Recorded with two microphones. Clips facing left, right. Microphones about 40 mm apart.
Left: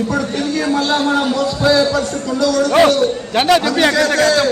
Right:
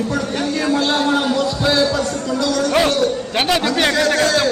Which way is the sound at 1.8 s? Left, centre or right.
Left.